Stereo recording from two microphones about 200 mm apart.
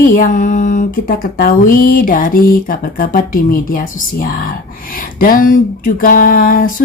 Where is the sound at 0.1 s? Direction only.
40° left (ahead or behind).